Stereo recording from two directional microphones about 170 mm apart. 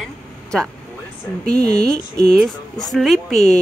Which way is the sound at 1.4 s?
5° left (ahead or behind).